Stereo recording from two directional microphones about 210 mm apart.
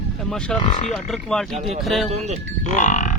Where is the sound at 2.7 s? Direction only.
35° left (ahead or behind).